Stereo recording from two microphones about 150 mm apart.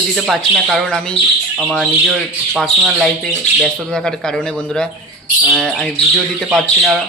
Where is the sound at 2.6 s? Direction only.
Centre (ahead or behind).